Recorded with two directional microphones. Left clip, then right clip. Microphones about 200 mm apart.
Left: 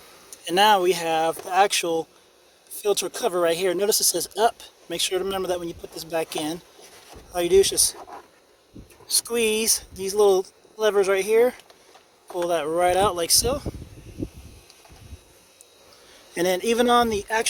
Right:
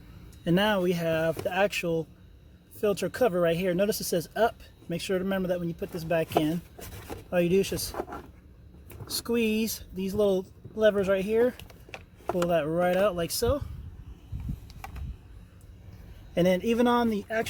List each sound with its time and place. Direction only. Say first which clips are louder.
0.3 s speech: left 8 dB; 30° left (ahead or behind)
9.0 s speech: left 5 dB; 25° left (ahead or behind)
16.3 s speech: left 3 dB; 30° left (ahead or behind)